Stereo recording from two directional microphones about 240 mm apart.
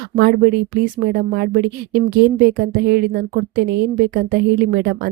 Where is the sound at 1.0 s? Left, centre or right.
Right.